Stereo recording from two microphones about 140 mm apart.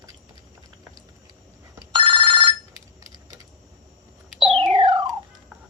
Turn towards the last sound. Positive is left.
turn(degrees=-35)  # may be behind; listen again after turning